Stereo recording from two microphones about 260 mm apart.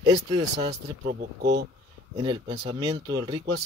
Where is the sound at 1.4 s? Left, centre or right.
Right.